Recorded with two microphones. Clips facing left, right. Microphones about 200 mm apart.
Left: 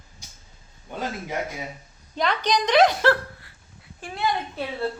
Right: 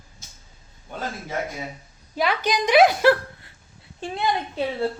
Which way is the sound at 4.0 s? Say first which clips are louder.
Right 2 dB; 20° right (ahead or behind).